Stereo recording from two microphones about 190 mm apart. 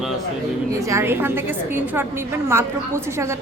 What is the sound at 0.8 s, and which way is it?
A woman's voice, 15° right (ahead or behind).